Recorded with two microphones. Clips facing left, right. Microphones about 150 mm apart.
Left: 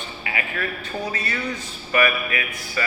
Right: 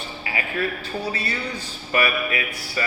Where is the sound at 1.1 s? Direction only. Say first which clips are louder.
Left 1 dB; 30° right (ahead or behind).